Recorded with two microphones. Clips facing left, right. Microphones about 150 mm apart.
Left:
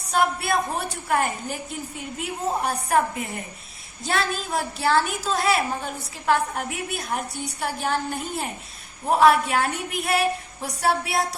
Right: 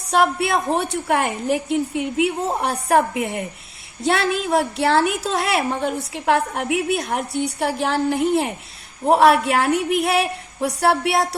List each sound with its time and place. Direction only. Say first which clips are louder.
0.1 s a woman's voice: right 4 dB; 70° right (ahead or behind)